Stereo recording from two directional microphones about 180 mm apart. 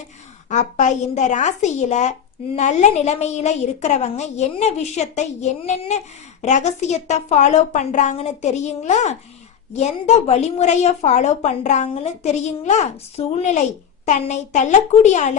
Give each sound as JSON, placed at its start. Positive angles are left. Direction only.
{"t": 0.4, "sound": "a woman's voice", "side_deg": 40}